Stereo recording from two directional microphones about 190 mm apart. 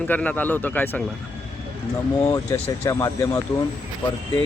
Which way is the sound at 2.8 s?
15° left (ahead or behind).